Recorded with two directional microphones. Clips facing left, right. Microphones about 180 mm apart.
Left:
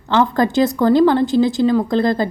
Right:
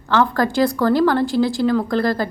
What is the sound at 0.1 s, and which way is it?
A woman's voice, 20° left (ahead or behind).